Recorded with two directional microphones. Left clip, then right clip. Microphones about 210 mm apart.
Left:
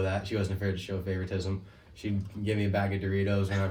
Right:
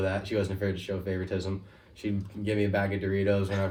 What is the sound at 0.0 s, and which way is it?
Speech, 15° right (ahead or behind).